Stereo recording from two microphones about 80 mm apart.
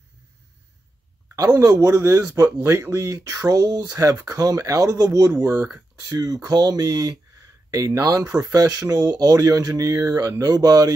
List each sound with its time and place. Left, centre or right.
1.6 s speech: right
3.3 s speech: right
5.6 s speech: right
5.9 s speech: right